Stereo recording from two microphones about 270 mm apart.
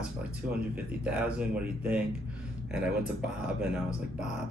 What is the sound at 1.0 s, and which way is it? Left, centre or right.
Speech, centre.